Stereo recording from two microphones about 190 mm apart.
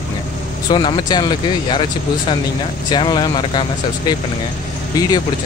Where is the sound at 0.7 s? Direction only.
25° left (ahead or behind).